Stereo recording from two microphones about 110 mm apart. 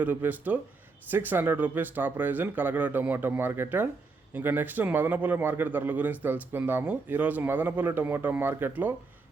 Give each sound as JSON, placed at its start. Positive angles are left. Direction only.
{"t": 0.0, "sound": "a man's voice", "side_deg": -15}